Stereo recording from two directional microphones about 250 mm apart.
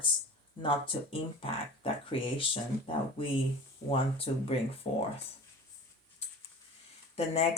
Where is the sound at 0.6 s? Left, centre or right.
Left.